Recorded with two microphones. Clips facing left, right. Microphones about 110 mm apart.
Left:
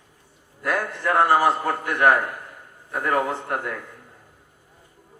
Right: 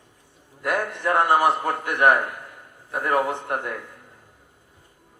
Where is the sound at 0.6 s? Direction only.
20° right (ahead or behind).